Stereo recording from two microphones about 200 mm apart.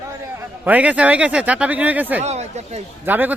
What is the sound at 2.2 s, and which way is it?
Speech, 35° right (ahead or behind).